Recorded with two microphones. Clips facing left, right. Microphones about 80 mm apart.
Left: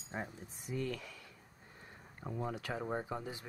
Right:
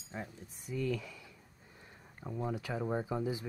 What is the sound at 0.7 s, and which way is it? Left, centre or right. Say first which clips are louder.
Speech: right 2 dB; left.